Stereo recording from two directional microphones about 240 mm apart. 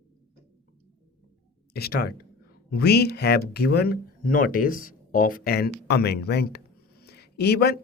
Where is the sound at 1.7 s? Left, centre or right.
Left.